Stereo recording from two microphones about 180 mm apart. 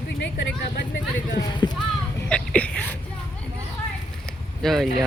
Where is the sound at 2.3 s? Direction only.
5° left (ahead or behind).